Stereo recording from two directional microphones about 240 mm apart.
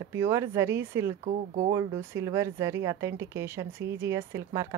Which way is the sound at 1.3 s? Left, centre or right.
Right.